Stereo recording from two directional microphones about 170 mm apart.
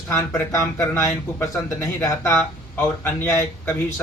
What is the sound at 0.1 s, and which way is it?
Speech, 15° left (ahead or behind).